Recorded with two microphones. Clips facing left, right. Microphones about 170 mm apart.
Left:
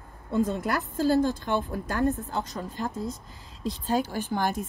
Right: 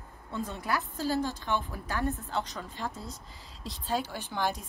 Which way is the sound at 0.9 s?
50° left (ahead or behind).